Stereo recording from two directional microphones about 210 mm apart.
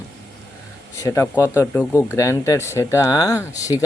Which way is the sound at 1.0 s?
15° left (ahead or behind).